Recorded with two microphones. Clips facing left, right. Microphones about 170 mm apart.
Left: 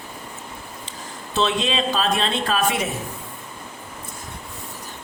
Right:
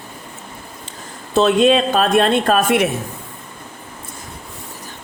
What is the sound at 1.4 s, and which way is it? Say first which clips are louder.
Speech: right 9 dB; 50° right (ahead or behind).